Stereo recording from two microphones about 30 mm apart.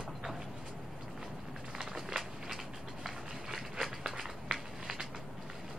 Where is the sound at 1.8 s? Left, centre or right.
Centre.